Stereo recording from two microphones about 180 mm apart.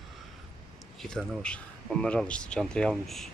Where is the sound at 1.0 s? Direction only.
5° left (ahead or behind).